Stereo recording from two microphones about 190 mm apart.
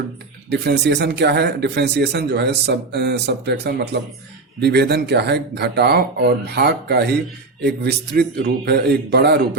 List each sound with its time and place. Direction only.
0.5 s speech: 60° right (ahead or behind)